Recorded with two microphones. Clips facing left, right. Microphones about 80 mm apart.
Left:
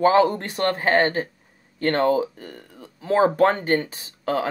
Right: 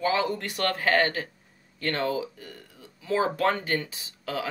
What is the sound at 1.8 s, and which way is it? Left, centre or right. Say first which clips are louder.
Speech: left 8 dB; left.